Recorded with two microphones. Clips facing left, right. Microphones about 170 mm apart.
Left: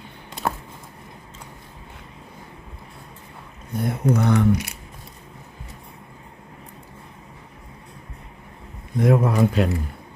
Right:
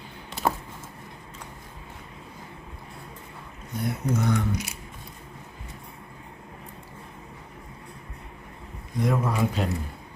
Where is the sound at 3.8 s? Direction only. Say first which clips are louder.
Left 5 dB; 60° left (ahead or behind).